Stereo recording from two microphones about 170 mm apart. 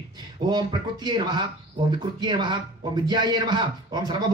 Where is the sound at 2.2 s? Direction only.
25° right (ahead or behind).